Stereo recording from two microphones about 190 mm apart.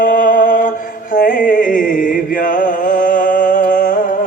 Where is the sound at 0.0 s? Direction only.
45° left (ahead or behind).